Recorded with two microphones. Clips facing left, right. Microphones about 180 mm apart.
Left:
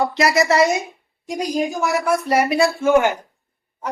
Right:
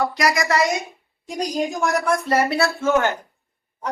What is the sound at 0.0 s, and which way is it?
Speech, 25° left (ahead or behind).